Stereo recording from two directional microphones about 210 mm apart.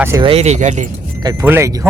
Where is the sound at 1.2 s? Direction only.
10° right (ahead or behind).